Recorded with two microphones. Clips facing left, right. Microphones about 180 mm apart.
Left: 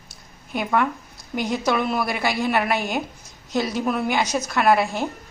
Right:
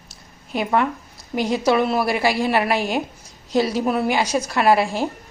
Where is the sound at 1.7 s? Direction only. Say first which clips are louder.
Right 5 dB; 35° right (ahead or behind).